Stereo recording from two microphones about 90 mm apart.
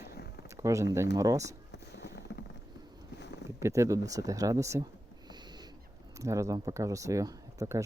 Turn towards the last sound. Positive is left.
turn(degrees=-35)  # may be behind; listen again after turning